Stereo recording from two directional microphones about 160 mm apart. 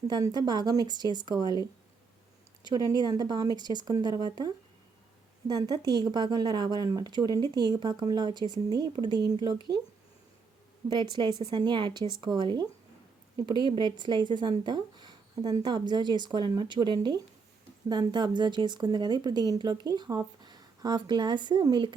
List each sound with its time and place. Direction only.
0.1 s speech: 25° right (ahead or behind)
2.6 s speech: 25° right (ahead or behind)
10.8 s speech: 25° right (ahead or behind)